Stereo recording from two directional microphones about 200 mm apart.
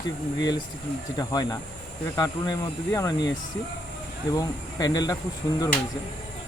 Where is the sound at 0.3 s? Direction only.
20° left (ahead or behind).